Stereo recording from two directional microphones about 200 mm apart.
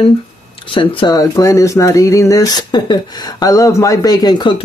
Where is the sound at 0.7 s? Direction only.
25° left (ahead or behind).